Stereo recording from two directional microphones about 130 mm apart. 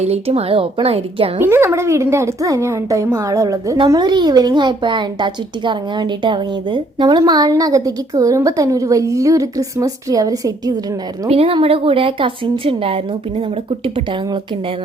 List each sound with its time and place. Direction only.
0.0 s a woman's voice: 55° right (ahead or behind)
1.4 s speech: 20° right (ahead or behind)
11.3 s a woman's voice: 45° right (ahead or behind)